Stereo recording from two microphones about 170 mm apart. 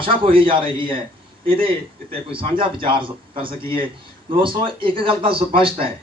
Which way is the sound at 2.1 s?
30° right (ahead or behind).